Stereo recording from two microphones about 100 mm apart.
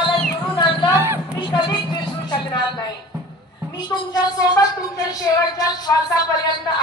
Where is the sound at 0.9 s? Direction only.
25° right (ahead or behind).